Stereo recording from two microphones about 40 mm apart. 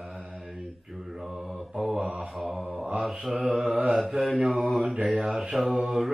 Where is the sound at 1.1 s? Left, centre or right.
Centre.